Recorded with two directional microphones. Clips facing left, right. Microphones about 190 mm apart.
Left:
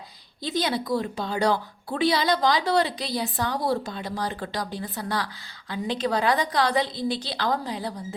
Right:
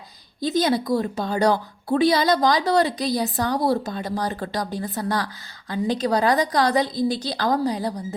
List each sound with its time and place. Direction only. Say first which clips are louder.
0.4 s a woman's voice: right 6 dB; 45° right (ahead or behind)